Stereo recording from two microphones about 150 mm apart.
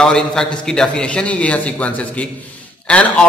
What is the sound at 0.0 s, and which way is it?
A man's voice, 5° left (ahead or behind).